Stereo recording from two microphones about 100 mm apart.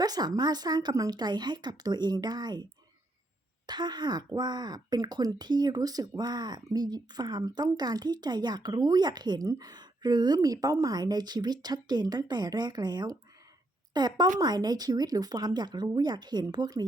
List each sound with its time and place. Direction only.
0.0 s speech: 40° right (ahead or behind)
3.7 s speech: 45° right (ahead or behind)